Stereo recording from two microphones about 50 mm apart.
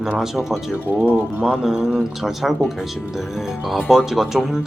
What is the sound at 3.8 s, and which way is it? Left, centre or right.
Speech, centre.